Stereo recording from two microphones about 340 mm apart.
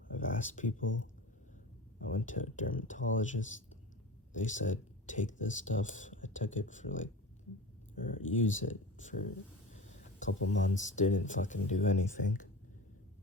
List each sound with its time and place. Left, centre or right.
0.1 s a sound: left
0.9 s speech: left
2.1 s speech: left
10.5 s speech: left